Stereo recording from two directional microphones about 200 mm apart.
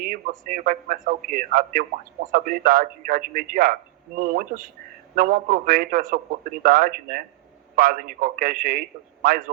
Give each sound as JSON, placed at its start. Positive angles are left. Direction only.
{"t": 0.0, "sound": "a man's voice", "side_deg": -45}